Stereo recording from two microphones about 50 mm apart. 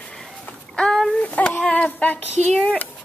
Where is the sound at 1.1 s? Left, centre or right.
Left.